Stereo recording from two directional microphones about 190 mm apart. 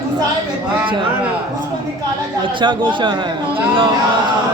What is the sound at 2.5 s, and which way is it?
A man's voice, 25° right (ahead or behind).